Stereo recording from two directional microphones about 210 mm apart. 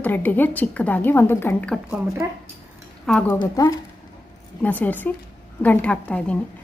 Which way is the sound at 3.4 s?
20° left (ahead or behind).